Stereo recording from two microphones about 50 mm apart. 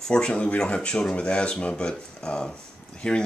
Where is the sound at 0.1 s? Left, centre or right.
Centre.